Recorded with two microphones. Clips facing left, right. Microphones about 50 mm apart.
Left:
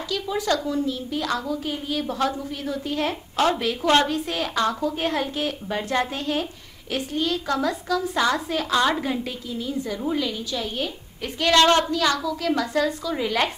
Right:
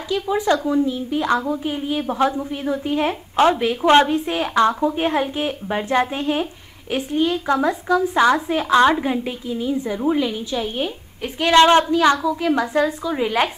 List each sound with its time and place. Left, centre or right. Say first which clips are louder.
0.1 s a woman's voice: right 6 dB; right